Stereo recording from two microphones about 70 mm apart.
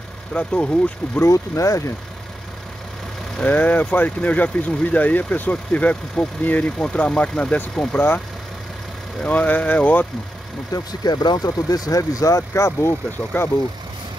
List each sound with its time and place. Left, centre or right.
0.3 s speech: centre
1.2 s speech: left
3.4 s speech: left
9.2 s speech: centre
10.7 s speech: left
13.3 s speech: left